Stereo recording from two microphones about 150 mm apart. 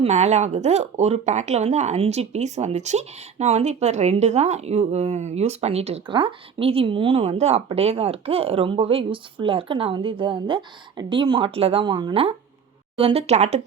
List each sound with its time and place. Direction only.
0.0 s speech: 50° right (ahead or behind)